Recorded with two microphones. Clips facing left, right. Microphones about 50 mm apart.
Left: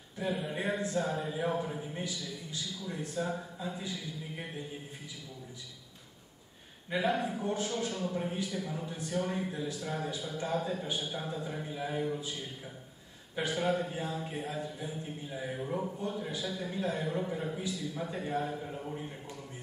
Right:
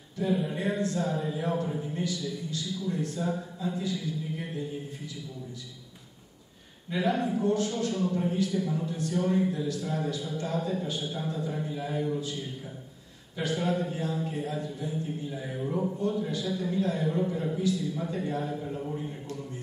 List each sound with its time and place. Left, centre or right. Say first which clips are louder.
0.3 s speech: right 6 dB; centre
0.6 s a man's voice: right 3 dB; centre
6.9 s a man's voice: right 3 dB; centre
7.4 s a man's voice: right 7 dB; centre
7.7 s a man's voice: right 5 dB; centre
13.4 s a man's voice: right 2 dB; centre